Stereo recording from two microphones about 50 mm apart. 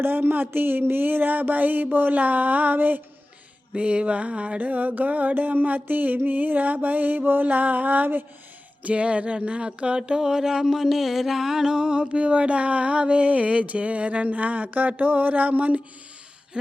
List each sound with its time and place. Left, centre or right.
0.0 s music: right
3.8 s music: right
8.8 s music: right